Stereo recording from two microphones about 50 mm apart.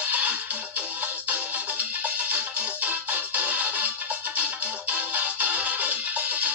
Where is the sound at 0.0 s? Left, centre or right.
Right.